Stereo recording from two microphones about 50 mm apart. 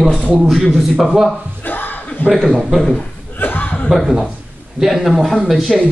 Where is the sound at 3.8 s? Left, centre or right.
Centre.